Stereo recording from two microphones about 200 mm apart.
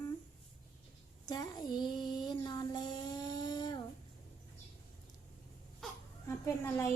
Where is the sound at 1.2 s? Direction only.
20° left (ahead or behind).